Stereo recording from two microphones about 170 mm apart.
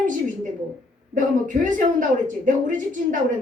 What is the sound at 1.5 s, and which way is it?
A woman's voice, 50° right (ahead or behind).